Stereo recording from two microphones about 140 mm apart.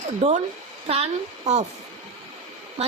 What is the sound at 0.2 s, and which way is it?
Speech, 50° right (ahead or behind).